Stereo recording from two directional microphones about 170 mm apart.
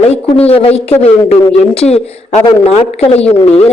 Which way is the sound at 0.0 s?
35° left (ahead or behind).